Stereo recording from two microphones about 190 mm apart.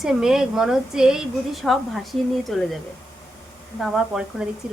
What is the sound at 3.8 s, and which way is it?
Speech, 5° right (ahead or behind).